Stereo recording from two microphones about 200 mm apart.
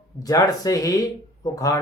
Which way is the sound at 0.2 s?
20° left (ahead or behind).